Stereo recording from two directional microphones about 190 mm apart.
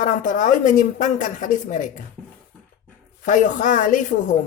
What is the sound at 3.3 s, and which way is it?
Speech, 40° left (ahead or behind).